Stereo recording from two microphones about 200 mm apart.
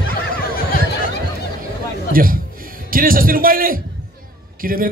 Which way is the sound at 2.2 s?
45° right (ahead or behind).